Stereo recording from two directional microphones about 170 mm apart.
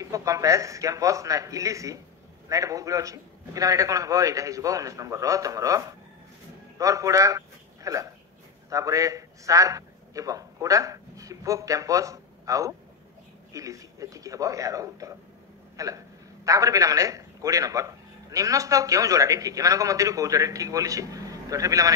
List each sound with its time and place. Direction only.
0.0 s a man's voice: 20° right (ahead or behind)